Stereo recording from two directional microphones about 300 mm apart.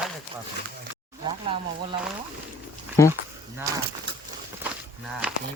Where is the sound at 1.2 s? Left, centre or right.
Centre.